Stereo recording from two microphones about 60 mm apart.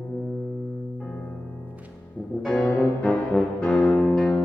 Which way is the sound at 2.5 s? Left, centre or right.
Left.